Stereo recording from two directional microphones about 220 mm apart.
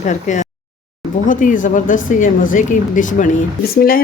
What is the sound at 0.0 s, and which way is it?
Speech, 35° left (ahead or behind).